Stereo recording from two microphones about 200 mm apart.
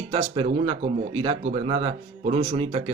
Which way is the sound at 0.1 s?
30° right (ahead or behind).